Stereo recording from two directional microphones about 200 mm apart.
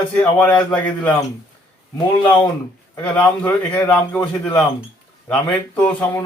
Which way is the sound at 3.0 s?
10° left (ahead or behind).